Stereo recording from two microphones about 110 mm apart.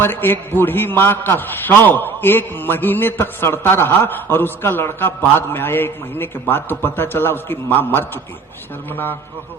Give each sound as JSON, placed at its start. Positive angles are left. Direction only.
{"t": 0.0, "sound": "a man's voice", "side_deg": 20}